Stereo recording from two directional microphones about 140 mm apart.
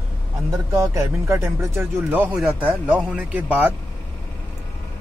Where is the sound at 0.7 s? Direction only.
20° right (ahead or behind).